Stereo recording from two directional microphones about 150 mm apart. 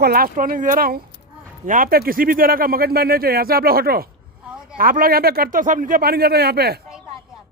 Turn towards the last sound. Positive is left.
turn(degrees=-90)